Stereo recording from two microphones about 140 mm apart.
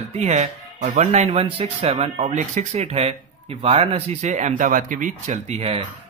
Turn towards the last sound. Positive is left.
turn(degrees=-50)  # may be behind; listen again after turning